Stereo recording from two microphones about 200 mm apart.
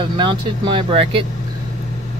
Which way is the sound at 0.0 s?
25° right (ahead or behind).